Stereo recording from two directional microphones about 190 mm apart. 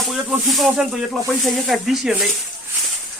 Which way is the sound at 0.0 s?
Centre (ahead or behind).